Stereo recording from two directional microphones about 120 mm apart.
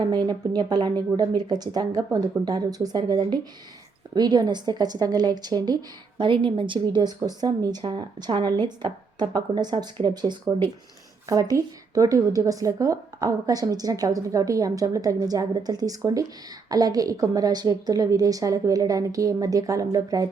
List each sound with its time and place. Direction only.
0.0 s a woman's voice: 35° right (ahead or behind)